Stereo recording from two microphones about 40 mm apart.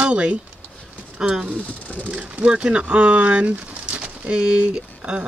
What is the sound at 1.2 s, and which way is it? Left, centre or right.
Speech, centre.